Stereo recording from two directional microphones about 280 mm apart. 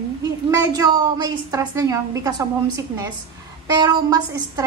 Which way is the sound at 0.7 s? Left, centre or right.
Centre.